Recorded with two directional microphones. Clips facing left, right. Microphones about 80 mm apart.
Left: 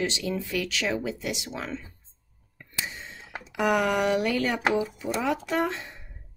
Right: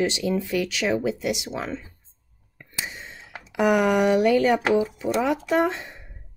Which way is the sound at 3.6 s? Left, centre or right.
Centre.